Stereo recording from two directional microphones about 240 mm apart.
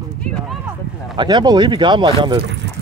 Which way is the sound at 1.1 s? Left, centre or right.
Centre.